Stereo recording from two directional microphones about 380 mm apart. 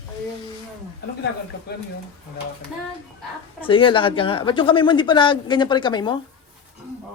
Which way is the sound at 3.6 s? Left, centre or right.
Centre.